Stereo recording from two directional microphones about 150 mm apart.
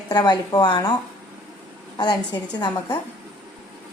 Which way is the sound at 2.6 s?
30° left (ahead or behind).